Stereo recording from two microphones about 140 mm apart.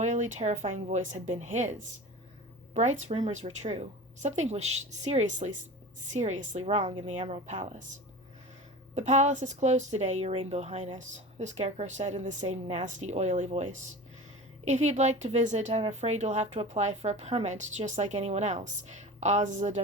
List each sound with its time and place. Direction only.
0.0 s a woman's voice: 55° right (ahead or behind)
9.0 s speech: 55° right (ahead or behind)